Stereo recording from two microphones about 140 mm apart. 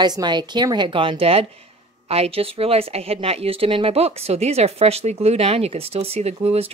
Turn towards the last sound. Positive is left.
turn(degrees=-45)  # may be behind; listen again after turning